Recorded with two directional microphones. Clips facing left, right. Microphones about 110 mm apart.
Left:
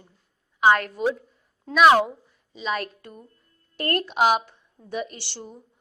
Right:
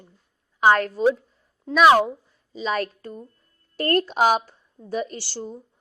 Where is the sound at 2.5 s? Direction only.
35° right (ahead or behind).